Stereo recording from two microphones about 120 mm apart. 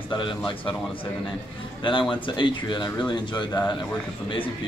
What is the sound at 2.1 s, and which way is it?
A man's voice, 40° left (ahead or behind).